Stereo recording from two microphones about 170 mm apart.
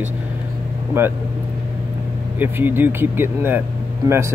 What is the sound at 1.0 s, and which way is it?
Speech, 15° right (ahead or behind).